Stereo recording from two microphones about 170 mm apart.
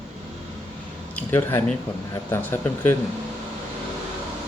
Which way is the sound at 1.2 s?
10° left (ahead or behind).